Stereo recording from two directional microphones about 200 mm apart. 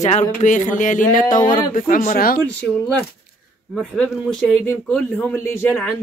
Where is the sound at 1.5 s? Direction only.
40° left (ahead or behind).